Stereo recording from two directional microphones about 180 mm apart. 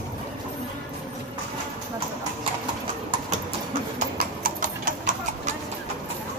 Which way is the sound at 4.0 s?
50° right (ahead or behind).